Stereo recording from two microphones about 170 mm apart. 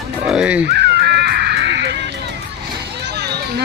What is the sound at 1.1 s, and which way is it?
Music, 70° right (ahead or behind).